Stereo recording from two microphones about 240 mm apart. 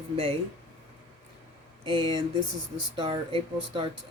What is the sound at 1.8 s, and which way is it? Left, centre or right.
Speech, right.